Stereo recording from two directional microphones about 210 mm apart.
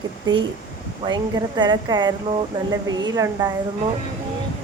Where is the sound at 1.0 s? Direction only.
20° right (ahead or behind).